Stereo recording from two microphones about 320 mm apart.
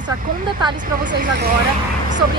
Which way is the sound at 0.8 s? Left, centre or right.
Right.